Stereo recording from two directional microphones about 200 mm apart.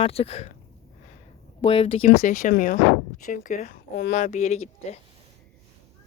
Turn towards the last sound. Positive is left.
turn(degrees=35)  # may be behind; listen again after turning